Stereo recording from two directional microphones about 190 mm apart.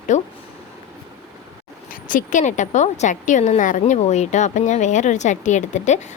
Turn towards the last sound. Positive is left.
turn(degrees=40)  # may be behind; listen again after turning